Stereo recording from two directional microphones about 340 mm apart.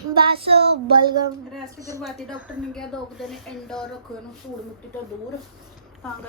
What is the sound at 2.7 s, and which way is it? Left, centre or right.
A woman's voice, centre.